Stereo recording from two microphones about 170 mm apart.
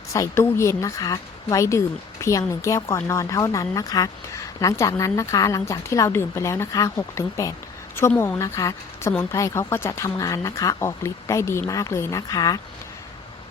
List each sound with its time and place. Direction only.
0.1 s a woman's voice: 15° left (ahead or behind)